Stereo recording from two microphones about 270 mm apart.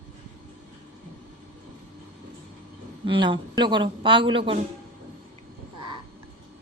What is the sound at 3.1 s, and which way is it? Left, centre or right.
A woman's voice, centre.